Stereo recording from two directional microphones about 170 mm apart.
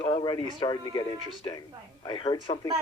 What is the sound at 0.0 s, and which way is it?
A man's voice, 30° left (ahead or behind).